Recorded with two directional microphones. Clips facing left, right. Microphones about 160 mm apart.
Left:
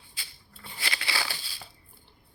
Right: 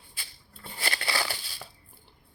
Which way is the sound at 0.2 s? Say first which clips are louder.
Right 2 dB; 45° right (ahead or behind).